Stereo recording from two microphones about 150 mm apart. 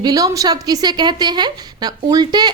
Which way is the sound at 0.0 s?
25° right (ahead or behind).